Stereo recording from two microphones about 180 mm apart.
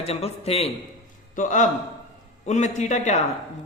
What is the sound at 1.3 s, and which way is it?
A man's voice, 45° left (ahead or behind).